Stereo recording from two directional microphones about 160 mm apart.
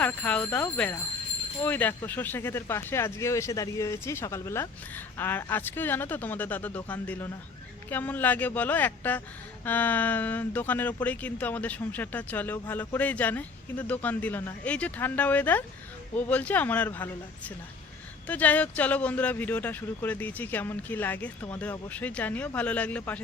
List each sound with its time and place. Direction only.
0.0 s speech: 10° left (ahead or behind)